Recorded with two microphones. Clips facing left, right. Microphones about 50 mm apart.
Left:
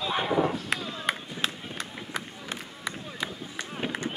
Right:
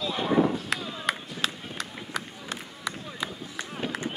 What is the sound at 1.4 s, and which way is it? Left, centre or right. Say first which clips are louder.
Run: right 1 dB; left.